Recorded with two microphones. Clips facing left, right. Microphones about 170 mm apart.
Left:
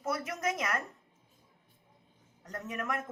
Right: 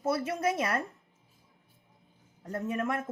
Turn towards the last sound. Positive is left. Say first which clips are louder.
# right 5 dB
turn(degrees=-30)  # may be behind; listen again after turning